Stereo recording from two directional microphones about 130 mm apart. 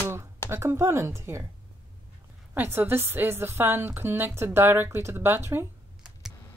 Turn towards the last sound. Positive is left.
turn(degrees=-15)  # may be behind; listen again after turning